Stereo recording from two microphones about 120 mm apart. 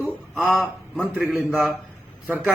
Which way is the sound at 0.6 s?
Centre (ahead or behind).